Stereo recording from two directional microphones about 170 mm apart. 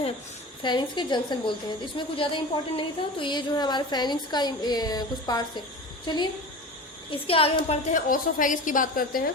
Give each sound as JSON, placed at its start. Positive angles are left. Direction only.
{"t": 0.6, "sound": "a woman's voice", "side_deg": 25}
{"t": 7.1, "sound": "a woman's voice", "side_deg": 35}
{"t": 7.9, "sound": "a woman's voice", "side_deg": 50}